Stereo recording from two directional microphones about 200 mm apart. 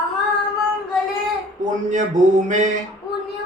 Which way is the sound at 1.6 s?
40° right (ahead or behind).